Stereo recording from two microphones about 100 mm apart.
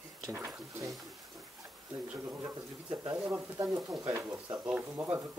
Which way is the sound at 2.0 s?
20° right (ahead or behind).